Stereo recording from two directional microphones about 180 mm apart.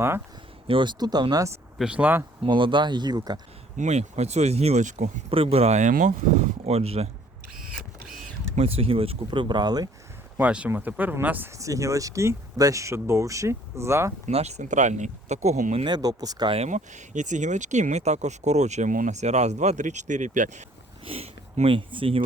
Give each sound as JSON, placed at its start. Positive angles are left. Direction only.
{"t": 0.7, "sound": "speech", "side_deg": -25}
{"t": 1.8, "sound": "speech", "side_deg": -5}
{"t": 2.4, "sound": "speech", "side_deg": -25}
{"t": 3.8, "sound": "speech", "side_deg": -40}
{"t": 8.5, "sound": "speech", "side_deg": -35}
{"t": 10.3, "sound": "speech", "side_deg": -10}
{"t": 14.3, "sound": "speech", "side_deg": -40}
{"t": 15.8, "sound": "speech", "side_deg": -20}
{"t": 16.6, "sound": "speech", "side_deg": -40}